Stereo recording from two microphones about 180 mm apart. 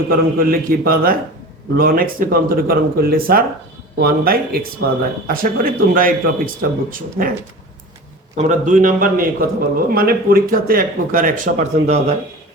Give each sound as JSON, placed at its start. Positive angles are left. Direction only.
{"t": 0.1, "sound": "a man's voice", "side_deg": -55}
{"t": 8.4, "sound": "a man's voice", "side_deg": -45}